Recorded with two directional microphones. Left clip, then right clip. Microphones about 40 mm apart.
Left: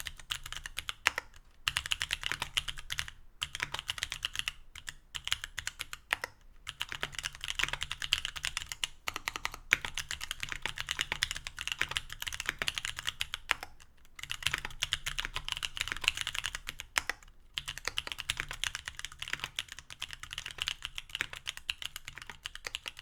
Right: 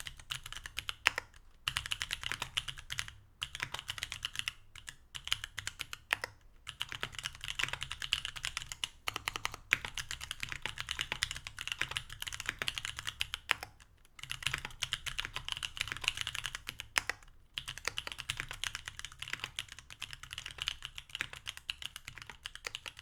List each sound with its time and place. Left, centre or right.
0.0 s typing: left
0.3 s typing: left
1.6 s computer keyboard: left
5.3 s typing: left
7.3 s computer keyboard: left
9.0 s computer keyboard: centre
9.6 s computer keyboard: left
14.2 s typing: left
16.9 s computer keyboard: centre
17.5 s computer keyboard: left